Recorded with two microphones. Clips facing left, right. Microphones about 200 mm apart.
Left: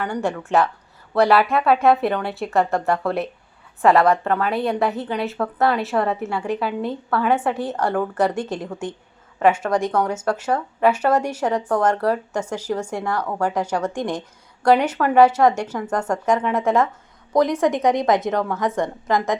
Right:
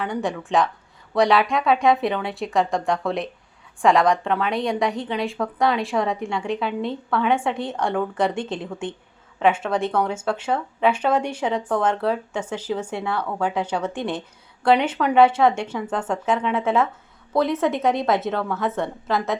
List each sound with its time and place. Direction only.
0.0 s a woman's voice: centre (ahead or behind)
15.8 s speech: 5° right (ahead or behind)
16.2 s speech: 10° left (ahead or behind)